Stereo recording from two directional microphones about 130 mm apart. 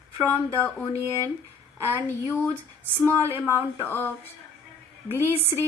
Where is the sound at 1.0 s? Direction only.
20° right (ahead or behind).